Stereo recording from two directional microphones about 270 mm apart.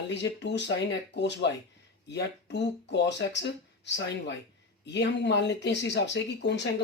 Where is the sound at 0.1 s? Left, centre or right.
Left.